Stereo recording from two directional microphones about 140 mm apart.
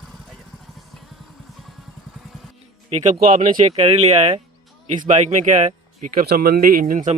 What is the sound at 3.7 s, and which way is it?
Speech, 50° right (ahead or behind).